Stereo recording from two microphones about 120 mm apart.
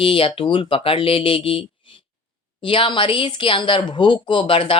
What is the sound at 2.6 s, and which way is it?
Speech, 45° left (ahead or behind).